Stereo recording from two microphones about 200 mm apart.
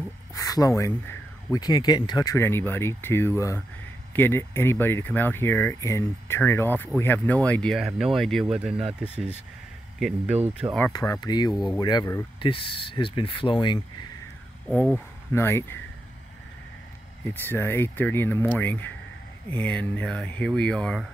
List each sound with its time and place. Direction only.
0.3 s speech: 15° left (ahead or behind); by 10.8 s 5° right (ahead or behind)
10.9 s speech: 20° left (ahead or behind)
15.3 s speech: 10° left (ahead or behind)
17.2 s speech: 10° left (ahead or behind)